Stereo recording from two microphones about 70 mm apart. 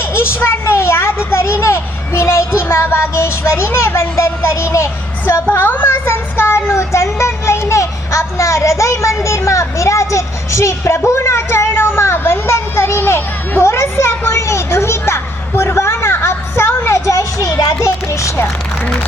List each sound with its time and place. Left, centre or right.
0.0 s speech: left
5.2 s speech: left